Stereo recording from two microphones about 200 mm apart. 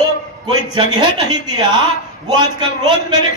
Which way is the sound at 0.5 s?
20° right (ahead or behind).